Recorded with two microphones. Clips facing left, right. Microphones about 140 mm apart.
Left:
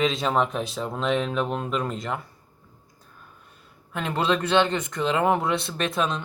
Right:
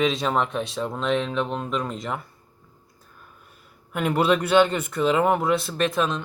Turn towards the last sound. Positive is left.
turn(degrees=0)  # may be behind; listen again after turning